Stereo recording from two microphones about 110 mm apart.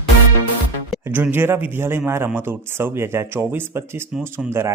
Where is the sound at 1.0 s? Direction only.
20° right (ahead or behind).